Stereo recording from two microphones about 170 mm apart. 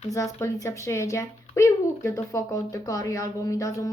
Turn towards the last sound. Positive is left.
turn(degrees=20)  # may be behind; listen again after turning